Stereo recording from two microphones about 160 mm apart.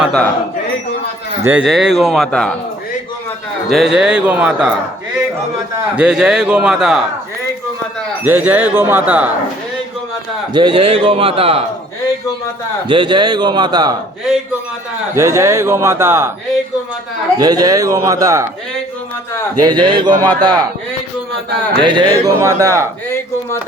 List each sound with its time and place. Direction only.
0.0 s speech: 5° left (ahead or behind)
1.5 s speech: 5° right (ahead or behind)
3.7 s speech: centre (ahead or behind)
6.0 s speech: 5° right (ahead or behind)
8.2 s a man's voice: 10° right (ahead or behind)
10.5 s a man's voice: 30° right (ahead or behind)
12.9 s a man's voice: 30° right (ahead or behind)
15.1 s a man's voice: 15° right (ahead or behind)
17.3 s a man's voice: 25° right (ahead or behind)
19.6 s a man's voice: 30° right (ahead or behind)
21.8 s a man's voice: 30° right (ahead or behind)
23.0 s speech: 15° left (ahead or behind)